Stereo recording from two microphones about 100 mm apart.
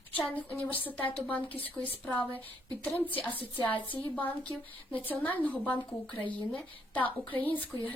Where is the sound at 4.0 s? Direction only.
15° left (ahead or behind).